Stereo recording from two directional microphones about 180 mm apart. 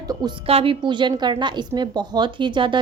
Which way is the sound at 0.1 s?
25° right (ahead or behind).